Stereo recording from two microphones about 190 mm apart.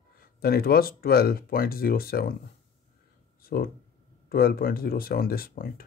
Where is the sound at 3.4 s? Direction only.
50° left (ahead or behind).